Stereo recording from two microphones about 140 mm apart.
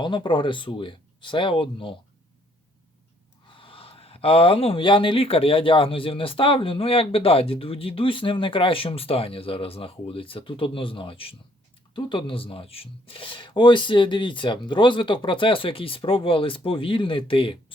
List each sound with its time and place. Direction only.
0.0 s speech: 35° left (ahead or behind)
3.5 s speech: 40° left (ahead or behind)